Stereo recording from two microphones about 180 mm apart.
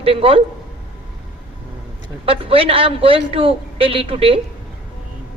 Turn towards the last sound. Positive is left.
turn(degrees=-30)  # may be behind; listen again after turning